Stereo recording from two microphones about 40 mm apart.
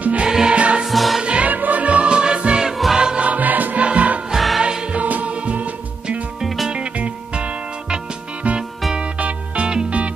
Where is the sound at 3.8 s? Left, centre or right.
Right.